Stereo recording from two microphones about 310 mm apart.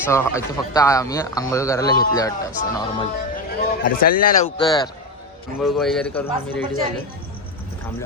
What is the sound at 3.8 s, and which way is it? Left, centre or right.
Speech, left.